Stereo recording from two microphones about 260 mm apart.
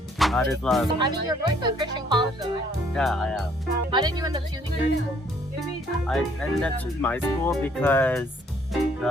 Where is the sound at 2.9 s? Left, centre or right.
Centre.